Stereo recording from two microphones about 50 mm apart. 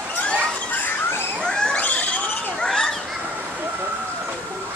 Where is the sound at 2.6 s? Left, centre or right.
Centre.